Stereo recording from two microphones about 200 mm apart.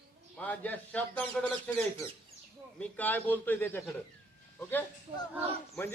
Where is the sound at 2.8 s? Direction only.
10° left (ahead or behind).